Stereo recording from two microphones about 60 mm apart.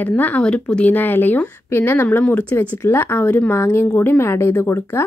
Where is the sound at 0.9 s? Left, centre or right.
Left.